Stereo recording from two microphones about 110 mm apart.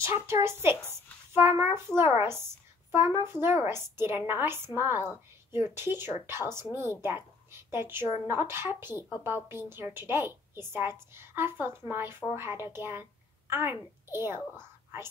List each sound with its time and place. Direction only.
0.0 s a woman's voice: 25° right (ahead or behind)